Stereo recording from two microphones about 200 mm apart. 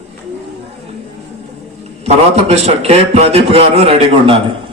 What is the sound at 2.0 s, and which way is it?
A man's voice, 30° right (ahead or behind).